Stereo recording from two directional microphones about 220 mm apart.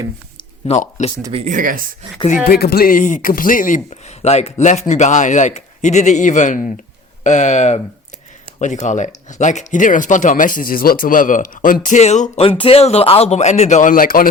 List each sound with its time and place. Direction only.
0.3 s a sound: 30° left (ahead or behind)
1.3 s speech: 30° right (ahead or behind)
2.5 s speech: 45° left (ahead or behind)